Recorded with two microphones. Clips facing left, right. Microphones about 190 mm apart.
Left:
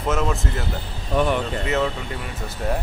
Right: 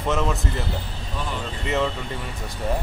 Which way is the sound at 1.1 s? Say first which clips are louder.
Left 11 dB; 65° left (ahead or behind).